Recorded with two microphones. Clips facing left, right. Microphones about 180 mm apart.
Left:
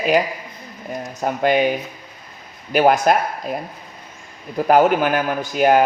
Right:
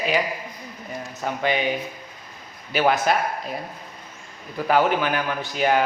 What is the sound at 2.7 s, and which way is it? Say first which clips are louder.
Speech: left 5 dB; 45° left (ahead or behind).